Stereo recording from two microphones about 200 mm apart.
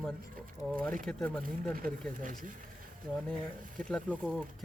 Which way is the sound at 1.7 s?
40° right (ahead or behind).